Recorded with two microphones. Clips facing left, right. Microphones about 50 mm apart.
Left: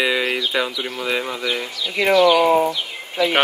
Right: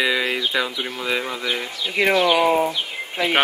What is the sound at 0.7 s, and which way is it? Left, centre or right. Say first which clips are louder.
Speech: left 1 dB; right.